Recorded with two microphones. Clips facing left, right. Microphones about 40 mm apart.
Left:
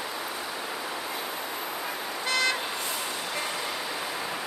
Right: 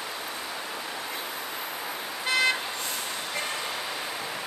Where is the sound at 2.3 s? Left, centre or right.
Centre.